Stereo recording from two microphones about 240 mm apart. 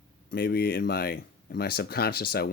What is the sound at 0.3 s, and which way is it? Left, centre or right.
Speech, left.